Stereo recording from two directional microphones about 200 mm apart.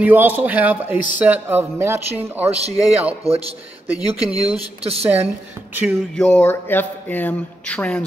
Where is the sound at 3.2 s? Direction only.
30° right (ahead or behind).